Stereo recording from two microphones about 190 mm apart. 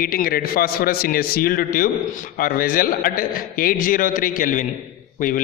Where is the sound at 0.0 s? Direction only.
50° left (ahead or behind).